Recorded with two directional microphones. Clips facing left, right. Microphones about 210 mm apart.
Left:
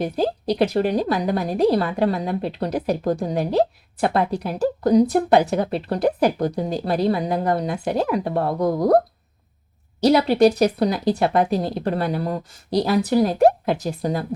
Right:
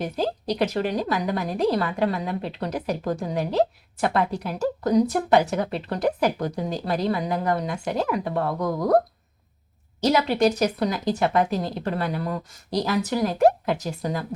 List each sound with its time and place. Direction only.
0.0 s speech: 35° left (ahead or behind)
10.0 s speech: 35° left (ahead or behind)